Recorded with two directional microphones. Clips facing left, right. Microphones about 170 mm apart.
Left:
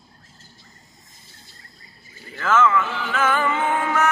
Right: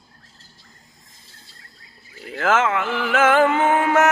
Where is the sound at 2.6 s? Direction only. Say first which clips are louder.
Left 1 dB; 80° right.